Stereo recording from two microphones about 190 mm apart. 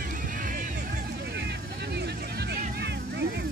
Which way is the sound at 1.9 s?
60° right (ahead or behind).